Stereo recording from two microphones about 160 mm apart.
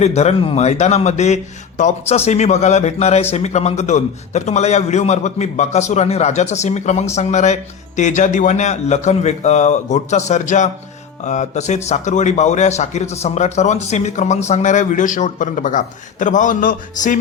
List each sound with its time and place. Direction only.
0.0 s a man's voice: 45° left (ahead or behind)